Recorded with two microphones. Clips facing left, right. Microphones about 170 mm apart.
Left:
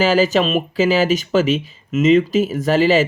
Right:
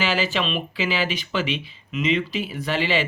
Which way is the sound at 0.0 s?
40° left (ahead or behind).